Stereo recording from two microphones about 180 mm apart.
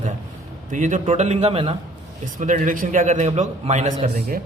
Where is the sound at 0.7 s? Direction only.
45° right (ahead or behind).